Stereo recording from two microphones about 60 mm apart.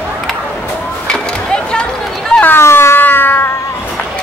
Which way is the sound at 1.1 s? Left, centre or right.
Centre.